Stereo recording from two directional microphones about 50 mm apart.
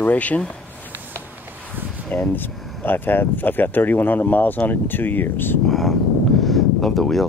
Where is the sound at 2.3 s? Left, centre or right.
Left.